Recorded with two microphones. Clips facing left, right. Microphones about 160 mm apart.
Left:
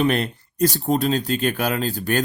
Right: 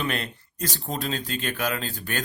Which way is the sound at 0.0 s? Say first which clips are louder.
Left 9 dB; 40° left (ahead or behind).